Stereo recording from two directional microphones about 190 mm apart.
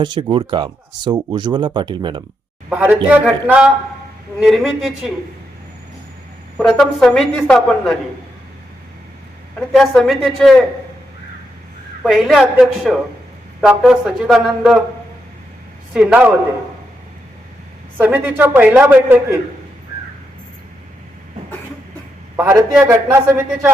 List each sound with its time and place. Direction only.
0.0 s speech: 25° right (ahead or behind)
2.6 s a man's voice: 10° right (ahead or behind)
6.6 s a woman's voice: centre (ahead or behind)
9.7 s a woman's voice: centre (ahead or behind)
12.0 s a woman's voice: centre (ahead or behind)
15.9 s a woman's voice: 5° right (ahead or behind)
17.9 s a man's voice: 10° right (ahead or behind)
22.4 s a man's voice: 15° right (ahead or behind)